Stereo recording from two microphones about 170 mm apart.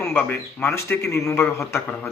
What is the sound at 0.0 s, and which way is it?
A man's voice, 10° left (ahead or behind).